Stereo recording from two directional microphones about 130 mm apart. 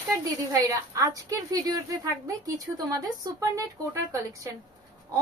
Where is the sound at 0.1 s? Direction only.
25° right (ahead or behind).